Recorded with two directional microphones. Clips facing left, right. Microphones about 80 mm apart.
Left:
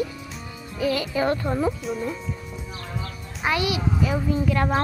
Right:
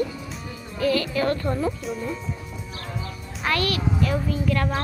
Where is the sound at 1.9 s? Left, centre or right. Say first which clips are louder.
Left 1 dB; centre.